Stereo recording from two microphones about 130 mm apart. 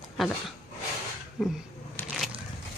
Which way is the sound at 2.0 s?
Centre (ahead or behind).